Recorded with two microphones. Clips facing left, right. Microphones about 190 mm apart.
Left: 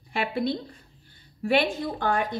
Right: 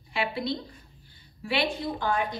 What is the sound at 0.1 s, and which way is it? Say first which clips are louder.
A woman's voice: left 3 dB; 50° left (ahead or behind).